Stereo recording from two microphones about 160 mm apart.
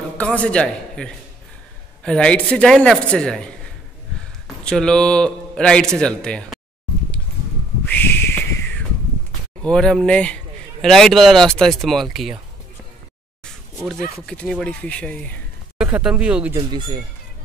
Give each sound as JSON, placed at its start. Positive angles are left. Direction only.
{"t": 0.2, "sound": "speech", "side_deg": 10}
{"t": 4.6, "sound": "speech", "side_deg": 5}
{"t": 7.8, "sound": "a sound", "side_deg": 10}
{"t": 9.6, "sound": "speech", "side_deg": 5}
{"t": 13.8, "sound": "speech", "side_deg": 5}
{"t": 15.8, "sound": "speech", "side_deg": -5}
{"t": 16.5, "sound": "speech", "side_deg": -30}